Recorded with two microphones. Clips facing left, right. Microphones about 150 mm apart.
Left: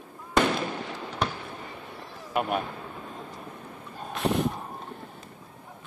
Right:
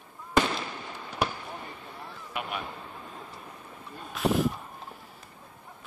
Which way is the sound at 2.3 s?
45° left (ahead or behind).